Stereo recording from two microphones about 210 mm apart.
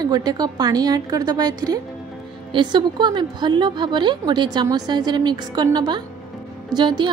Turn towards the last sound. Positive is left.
turn(degrees=-20)  # may be behind; listen again after turning